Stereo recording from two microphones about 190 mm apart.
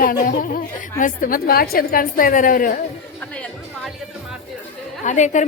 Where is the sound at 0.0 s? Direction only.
45° left (ahead or behind).